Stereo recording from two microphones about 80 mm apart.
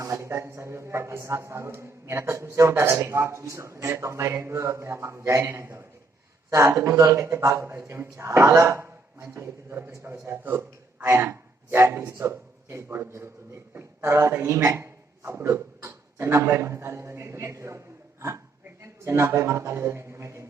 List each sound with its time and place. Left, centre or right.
0.0 s a man's voice: right